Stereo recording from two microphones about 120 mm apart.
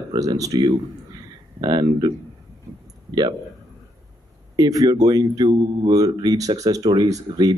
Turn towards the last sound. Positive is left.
turn(degrees=-30)  # may be behind; listen again after turning